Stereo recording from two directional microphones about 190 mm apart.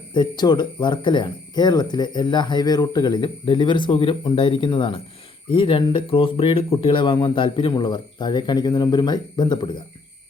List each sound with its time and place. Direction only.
0.1 s speech: 25° left (ahead or behind)